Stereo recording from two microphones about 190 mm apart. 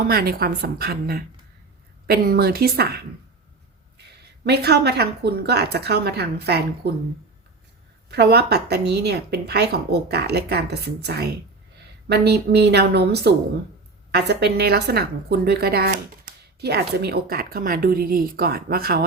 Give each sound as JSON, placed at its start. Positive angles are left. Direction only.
{"t": 0.1, "sound": "a woman's voice", "side_deg": -50}
{"t": 4.4, "sound": "a woman's voice", "side_deg": -60}
{"t": 8.1, "sound": "a woman's voice", "side_deg": -55}